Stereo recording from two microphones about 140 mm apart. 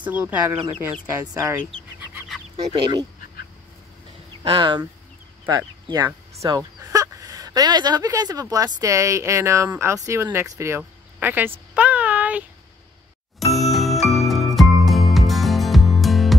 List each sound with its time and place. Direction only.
0.0 s speech: 10° right (ahead or behind)
1.2 s speech: 25° right (ahead or behind)
2.5 s speech: 40° right (ahead or behind)
4.4 s speech: 35° right (ahead or behind)
10.8 s a sound: 15° right (ahead or behind)
13.5 s music: centre (ahead or behind)